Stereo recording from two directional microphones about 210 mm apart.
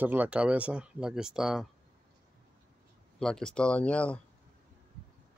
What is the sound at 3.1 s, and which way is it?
Speech, 5° left (ahead or behind).